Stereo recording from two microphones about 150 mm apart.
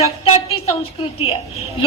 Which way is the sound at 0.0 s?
45° left (ahead or behind).